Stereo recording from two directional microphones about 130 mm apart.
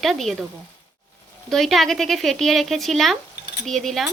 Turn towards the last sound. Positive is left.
turn(degrees=0)  # may be behind; listen again after turning